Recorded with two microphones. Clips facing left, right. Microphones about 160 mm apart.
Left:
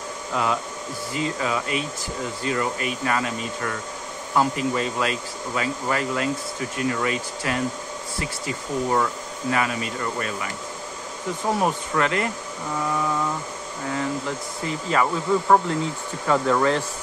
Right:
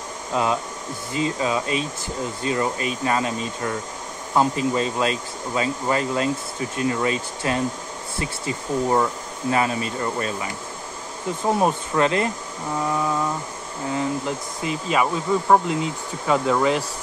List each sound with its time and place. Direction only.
0.3 s speech: 25° right (ahead or behind)
13.9 s speech: 20° right (ahead or behind)